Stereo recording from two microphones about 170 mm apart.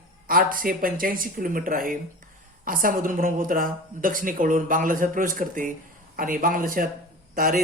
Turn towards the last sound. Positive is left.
turn(degrees=-55)  # may be behind; listen again after turning